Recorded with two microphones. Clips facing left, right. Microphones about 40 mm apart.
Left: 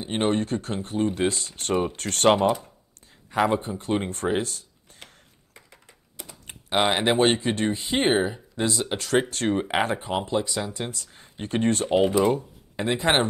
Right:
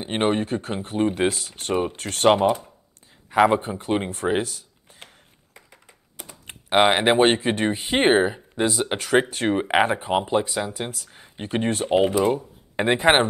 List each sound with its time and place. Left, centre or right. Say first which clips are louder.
0.0 s speech: right 2 dB; right
1.3 s speech: right 1 dB; centre
3.3 s speech: right 5 dB; right
5.0 s computer keyboard: right 1 dB; centre
8.9 s speech: right 3 dB; centre
12.7 s speech: right 5 dB; right